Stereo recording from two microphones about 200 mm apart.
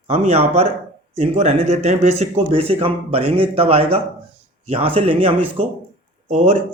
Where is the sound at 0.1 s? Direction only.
30° right (ahead or behind).